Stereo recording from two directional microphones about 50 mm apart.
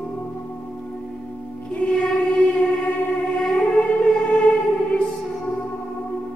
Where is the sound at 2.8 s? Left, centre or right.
Left.